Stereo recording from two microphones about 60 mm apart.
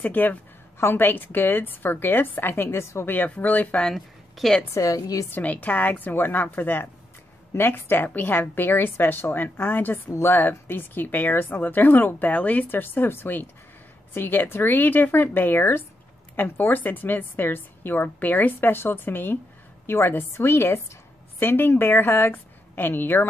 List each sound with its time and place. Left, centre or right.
0.0 s speech: left
0.7 s speech: left
2.8 s a woman's voice: left
3.1 s speech: left
3.9 s a woman's voice: centre
4.7 s a woman's voice: left
5.3 s a woman's voice: left